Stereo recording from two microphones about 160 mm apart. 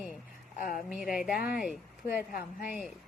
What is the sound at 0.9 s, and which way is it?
Speech, 5° right (ahead or behind).